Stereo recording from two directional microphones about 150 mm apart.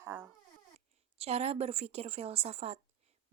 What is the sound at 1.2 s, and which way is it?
Speech, 45° right (ahead or behind).